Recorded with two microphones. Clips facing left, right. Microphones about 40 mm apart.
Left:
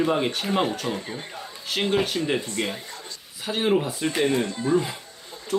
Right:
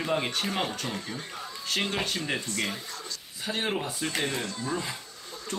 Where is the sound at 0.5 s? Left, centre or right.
Centre.